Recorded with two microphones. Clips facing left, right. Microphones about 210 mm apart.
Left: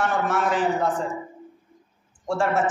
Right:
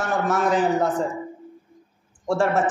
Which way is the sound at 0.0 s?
40° right (ahead or behind).